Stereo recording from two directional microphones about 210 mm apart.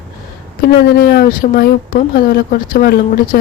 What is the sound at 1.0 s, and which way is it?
A woman's voice, 45° left (ahead or behind).